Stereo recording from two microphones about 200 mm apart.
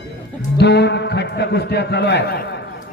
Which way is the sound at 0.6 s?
55° left (ahead or behind).